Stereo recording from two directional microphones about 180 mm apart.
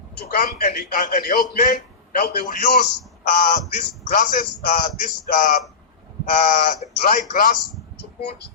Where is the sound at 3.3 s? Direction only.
45° left (ahead or behind).